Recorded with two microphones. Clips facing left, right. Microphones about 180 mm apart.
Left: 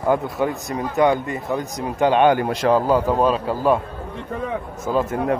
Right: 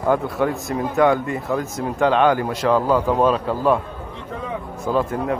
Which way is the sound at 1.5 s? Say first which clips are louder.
Right 1 dB; 20° left (ahead or behind).